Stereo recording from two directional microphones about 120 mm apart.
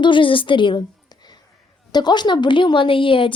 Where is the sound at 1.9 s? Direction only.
35° left (ahead or behind).